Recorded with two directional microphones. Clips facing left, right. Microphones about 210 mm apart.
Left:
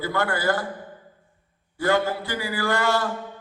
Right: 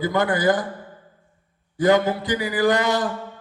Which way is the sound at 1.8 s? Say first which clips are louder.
Right 5 dB; 15° right (ahead or behind).